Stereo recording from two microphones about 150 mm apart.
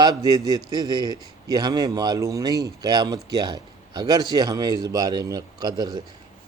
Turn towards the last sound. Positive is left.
turn(degrees=-25)  # may be behind; listen again after turning